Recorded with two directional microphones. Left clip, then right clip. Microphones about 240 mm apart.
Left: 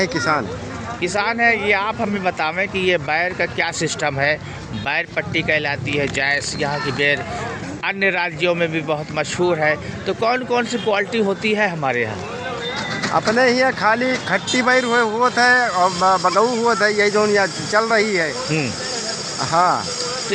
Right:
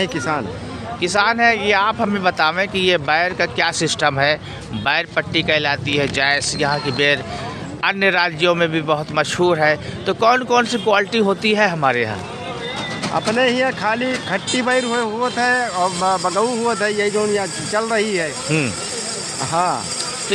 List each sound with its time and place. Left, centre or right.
1.0 s a man's voice: centre
13.1 s a man's voice: centre
17.2 s speech: centre
17.7 s speech: centre
18.4 s speech: right
19.5 s speech: centre